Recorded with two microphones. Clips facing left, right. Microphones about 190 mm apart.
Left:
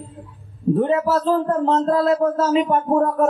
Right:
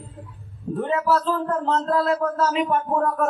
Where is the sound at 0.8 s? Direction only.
25° left (ahead or behind).